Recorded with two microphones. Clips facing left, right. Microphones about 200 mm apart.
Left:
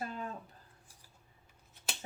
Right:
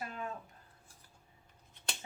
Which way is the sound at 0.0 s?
35° left (ahead or behind).